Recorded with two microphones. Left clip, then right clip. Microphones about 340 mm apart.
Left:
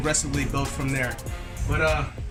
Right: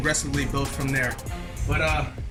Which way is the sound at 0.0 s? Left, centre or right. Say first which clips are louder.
Right 1 dB; centre.